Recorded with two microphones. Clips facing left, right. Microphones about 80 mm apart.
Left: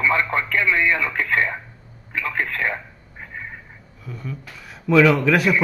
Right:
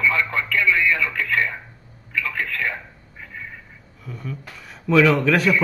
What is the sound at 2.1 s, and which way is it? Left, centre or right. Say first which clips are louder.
Telephone: left 1 dB; left.